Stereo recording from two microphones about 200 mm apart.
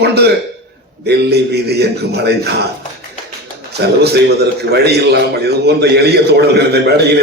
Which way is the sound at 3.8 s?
55° right (ahead or behind).